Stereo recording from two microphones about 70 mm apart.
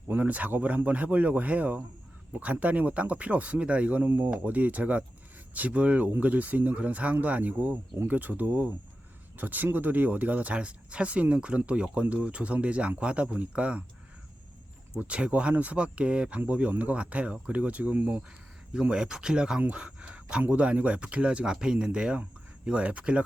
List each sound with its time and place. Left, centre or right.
0.1 s speech: right
14.9 s speech: centre
18.7 s speech: centre